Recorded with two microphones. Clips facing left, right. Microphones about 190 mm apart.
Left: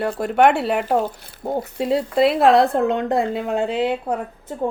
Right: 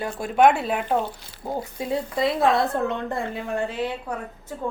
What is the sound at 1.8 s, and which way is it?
Speech, 70° left (ahead or behind).